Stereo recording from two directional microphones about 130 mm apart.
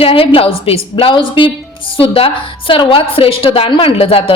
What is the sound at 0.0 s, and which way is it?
A woman's voice, 45° left (ahead or behind).